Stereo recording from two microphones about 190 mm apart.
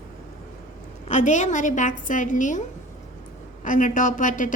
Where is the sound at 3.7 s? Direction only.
45° left (ahead or behind).